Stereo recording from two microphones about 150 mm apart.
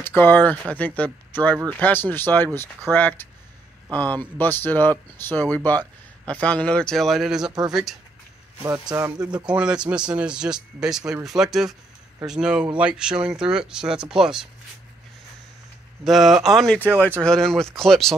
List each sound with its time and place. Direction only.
0.0 s speech: 15° left (ahead or behind); by 8.0 s centre (ahead or behind)
8.6 s speech: 20° right (ahead or behind)
9.3 s speech: 5° right (ahead or behind)
16.0 s speech: centre (ahead or behind)